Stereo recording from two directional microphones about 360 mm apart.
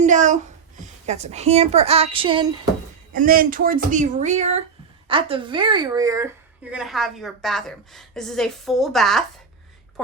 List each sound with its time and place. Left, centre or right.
0.0 s a woman's voice: right; by 9.2 s centre